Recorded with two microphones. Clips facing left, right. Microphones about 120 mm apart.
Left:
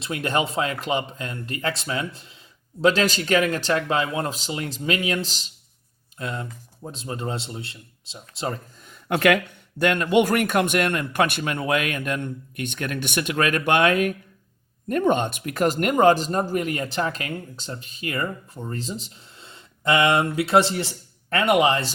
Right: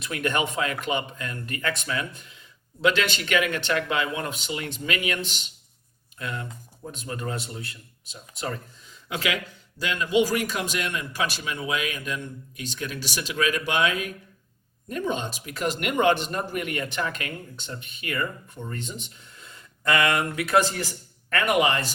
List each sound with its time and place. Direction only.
0.0 s speech: 30° left (ahead or behind)
8.8 s a man's voice: 55° left (ahead or behind); by 21.9 s 30° left (ahead or behind)